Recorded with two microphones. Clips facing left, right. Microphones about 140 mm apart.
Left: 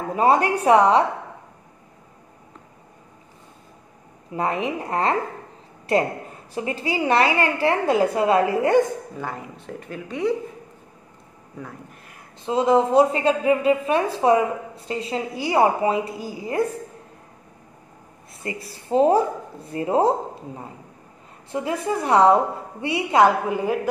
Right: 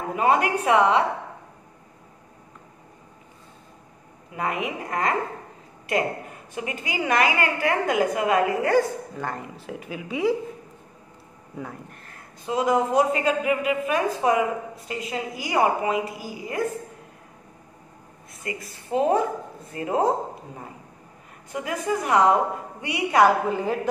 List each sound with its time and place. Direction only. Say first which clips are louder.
0.1 s a woman's voice: left 3 dB; 35° left (ahead or behind)
4.3 s a woman's voice: left 4 dB; 30° left (ahead or behind)
9.1 s a woman's voice: even; 5° left (ahead or behind)
12.4 s a woman's voice: left 4 dB; 30° left (ahead or behind)
18.4 s a woman's voice: left 2 dB; 30° left (ahead or behind)
21.5 s a woman's voice: left 2 dB; 30° left (ahead or behind)